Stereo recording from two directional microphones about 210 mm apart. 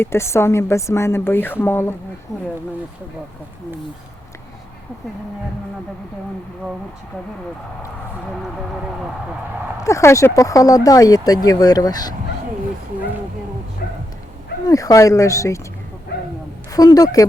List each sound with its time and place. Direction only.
0.0 s speech: 10° left (ahead or behind)
9.8 s speech: 15° left (ahead or behind)
13.8 s dog: 45° left (ahead or behind)
14.7 s speech: 15° left (ahead or behind)
16.1 s dog: 50° left (ahead or behind)
16.7 s speech: 15° left (ahead or behind)